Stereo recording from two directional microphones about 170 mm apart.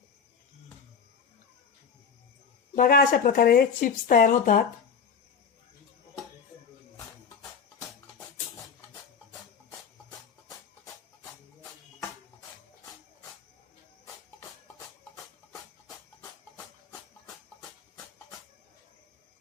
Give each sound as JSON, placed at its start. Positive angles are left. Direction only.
{"t": 2.7, "sound": "speech", "side_deg": 55}